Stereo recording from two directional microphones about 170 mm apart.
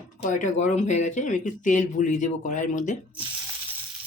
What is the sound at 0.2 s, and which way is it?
Speech, 45° left (ahead or behind).